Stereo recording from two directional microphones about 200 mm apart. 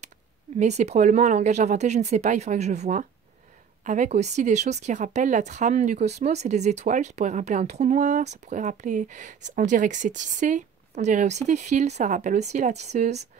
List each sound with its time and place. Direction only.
0.6 s speech: 35° right (ahead or behind)